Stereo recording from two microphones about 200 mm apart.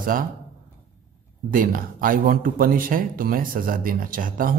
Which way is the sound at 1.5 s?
45° right (ahead or behind).